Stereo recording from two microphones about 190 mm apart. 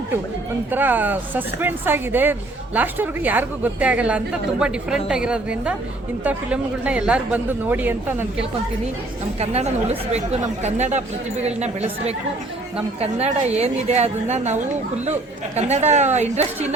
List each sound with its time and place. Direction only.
0.7 s a man's voice: 10° right (ahead or behind)
9.4 s a woman's voice: 35° right (ahead or behind)